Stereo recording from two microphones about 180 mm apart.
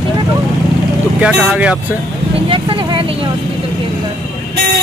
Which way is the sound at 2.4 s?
30° right (ahead or behind).